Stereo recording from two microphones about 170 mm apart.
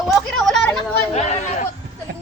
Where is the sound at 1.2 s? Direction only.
40° left (ahead or behind).